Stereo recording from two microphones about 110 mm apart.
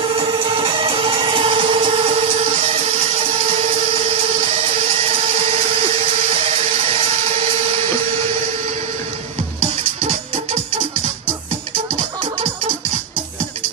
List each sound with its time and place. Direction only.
0.3 s music: 50° right (ahead or behind); by 2.6 s 65° right (ahead or behind)
10.0 s music: 70° right (ahead or behind)